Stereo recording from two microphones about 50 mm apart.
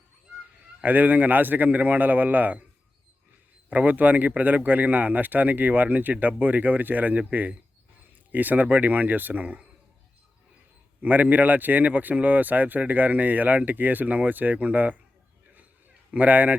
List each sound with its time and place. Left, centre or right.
0.8 s speech: right
3.7 s speech: right
11.0 s speech: right
16.1 s speech: right